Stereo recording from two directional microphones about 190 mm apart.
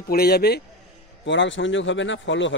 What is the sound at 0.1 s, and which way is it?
Speech, 55° left (ahead or behind).